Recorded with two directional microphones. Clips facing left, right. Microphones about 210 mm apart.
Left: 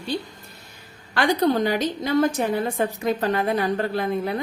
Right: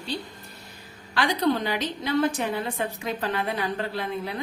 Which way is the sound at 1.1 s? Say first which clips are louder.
Left 4 dB; 45° left (ahead or behind).